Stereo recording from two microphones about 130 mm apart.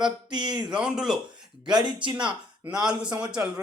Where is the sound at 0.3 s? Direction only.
35° right (ahead or behind).